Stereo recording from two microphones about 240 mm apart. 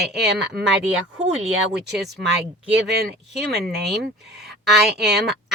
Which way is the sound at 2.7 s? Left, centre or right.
Right.